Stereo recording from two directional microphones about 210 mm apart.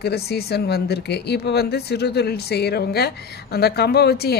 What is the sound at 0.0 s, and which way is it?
A woman's voice, 50° left (ahead or behind).